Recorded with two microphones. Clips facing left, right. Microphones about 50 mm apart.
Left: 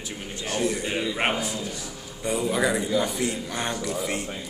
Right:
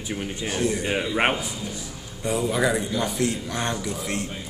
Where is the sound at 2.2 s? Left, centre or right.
Centre.